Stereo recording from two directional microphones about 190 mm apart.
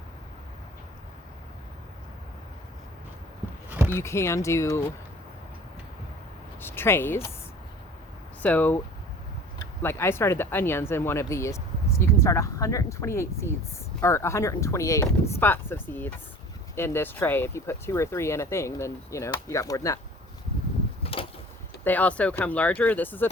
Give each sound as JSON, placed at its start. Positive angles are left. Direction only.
{"t": 3.9, "sound": "speech", "side_deg": 15}
{"t": 6.6, "sound": "a sound", "side_deg": 10}
{"t": 8.4, "sound": "speech", "side_deg": 10}
{"t": 9.8, "sound": "speech", "side_deg": 10}
{"t": 21.0, "sound": "a sound", "side_deg": 30}
{"t": 21.8, "sound": "speech", "side_deg": 10}